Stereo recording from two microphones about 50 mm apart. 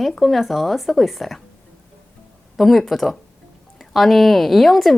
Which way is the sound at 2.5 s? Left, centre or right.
Centre.